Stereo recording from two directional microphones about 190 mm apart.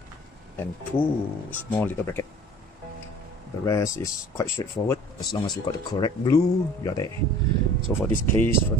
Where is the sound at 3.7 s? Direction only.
15° left (ahead or behind).